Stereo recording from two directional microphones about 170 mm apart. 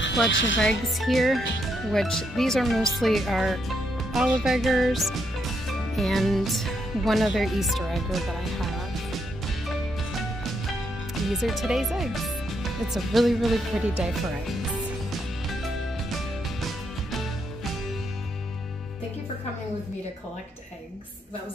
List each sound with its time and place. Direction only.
0.3 s a woman's voice: 90° left
0.7 s speech: centre (ahead or behind)
11.2 s speech: centre (ahead or behind)
16.6 s music: centre (ahead or behind)